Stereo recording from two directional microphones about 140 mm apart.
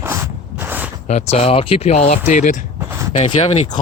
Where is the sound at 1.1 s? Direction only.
50° left (ahead or behind).